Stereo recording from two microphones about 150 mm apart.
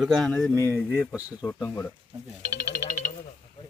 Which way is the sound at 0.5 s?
15° left (ahead or behind).